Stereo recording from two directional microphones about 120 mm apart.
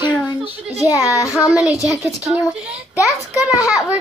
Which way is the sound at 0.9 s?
25° left (ahead or behind).